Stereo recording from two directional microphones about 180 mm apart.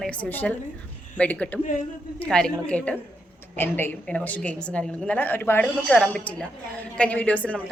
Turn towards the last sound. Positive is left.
turn(degrees=10)  # may be behind; listen again after turning